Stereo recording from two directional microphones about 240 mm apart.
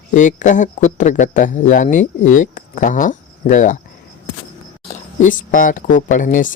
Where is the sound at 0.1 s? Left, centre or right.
Left.